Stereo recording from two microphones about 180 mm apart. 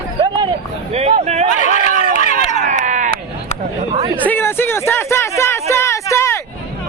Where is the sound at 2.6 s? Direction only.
40° right (ahead or behind).